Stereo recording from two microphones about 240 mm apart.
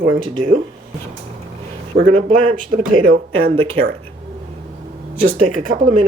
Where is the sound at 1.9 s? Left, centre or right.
Right.